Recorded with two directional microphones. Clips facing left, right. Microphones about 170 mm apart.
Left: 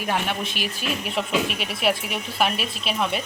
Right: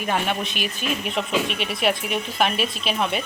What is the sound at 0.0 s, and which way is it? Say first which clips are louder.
Speech: right 1 dB; 5° left (ahead or behind).